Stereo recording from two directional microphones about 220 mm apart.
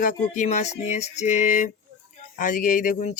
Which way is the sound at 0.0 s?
35° left (ahead or behind).